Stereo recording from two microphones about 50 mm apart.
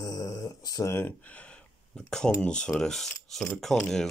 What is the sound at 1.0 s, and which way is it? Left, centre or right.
Speech, left.